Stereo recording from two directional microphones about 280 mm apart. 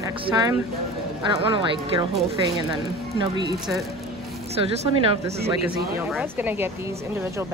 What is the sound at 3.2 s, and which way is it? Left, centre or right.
Speech, centre.